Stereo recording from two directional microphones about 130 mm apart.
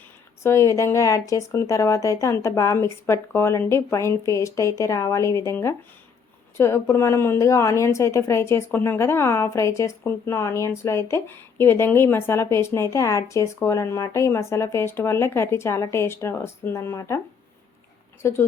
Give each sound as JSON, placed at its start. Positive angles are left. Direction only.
{"t": 0.4, "sound": "a woman's voice", "side_deg": 20}
{"t": 18.2, "sound": "speech", "side_deg": 20}